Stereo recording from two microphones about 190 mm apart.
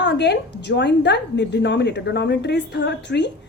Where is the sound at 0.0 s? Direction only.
65° left (ahead or behind).